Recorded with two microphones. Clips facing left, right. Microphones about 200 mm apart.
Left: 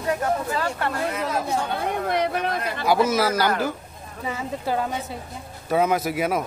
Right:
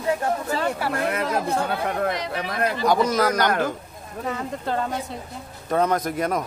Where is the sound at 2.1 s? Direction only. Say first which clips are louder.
Left 5 dB; 60° left (ahead or behind).